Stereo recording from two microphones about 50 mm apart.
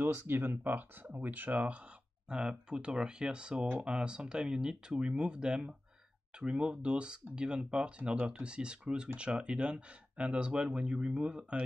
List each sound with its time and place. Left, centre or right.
0.3 s speech: right
2.2 s speech: centre